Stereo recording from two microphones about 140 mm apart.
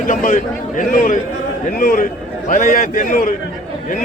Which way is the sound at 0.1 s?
65° left (ahead or behind).